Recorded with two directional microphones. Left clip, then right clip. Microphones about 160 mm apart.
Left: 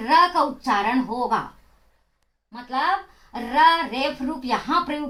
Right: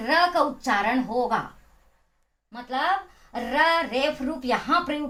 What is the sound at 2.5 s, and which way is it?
Speech, 25° right (ahead or behind).